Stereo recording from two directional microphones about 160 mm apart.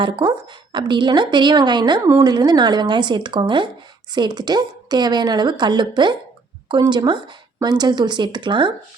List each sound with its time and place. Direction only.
0.0 s a woman's voice: 30° right (ahead or behind)